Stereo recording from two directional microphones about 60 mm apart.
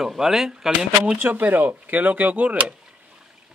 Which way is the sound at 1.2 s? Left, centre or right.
Right.